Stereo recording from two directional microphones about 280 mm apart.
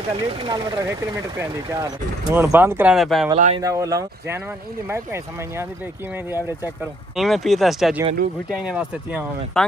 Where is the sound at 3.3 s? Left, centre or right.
Right.